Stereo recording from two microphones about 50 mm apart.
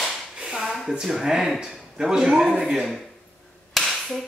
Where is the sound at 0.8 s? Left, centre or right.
Centre.